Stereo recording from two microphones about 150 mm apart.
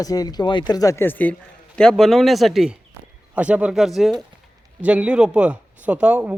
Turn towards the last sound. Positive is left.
turn(degrees=-10)  # may be behind; listen again after turning